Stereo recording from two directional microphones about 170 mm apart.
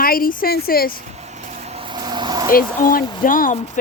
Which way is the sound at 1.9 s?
25° right (ahead or behind).